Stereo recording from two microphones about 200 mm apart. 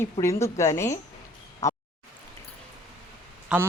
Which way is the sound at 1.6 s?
15° left (ahead or behind).